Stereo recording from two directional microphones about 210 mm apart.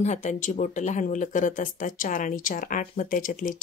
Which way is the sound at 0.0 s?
35° left (ahead or behind).